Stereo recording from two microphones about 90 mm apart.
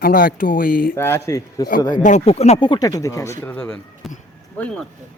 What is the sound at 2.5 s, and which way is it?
Speech, 65° left (ahead or behind).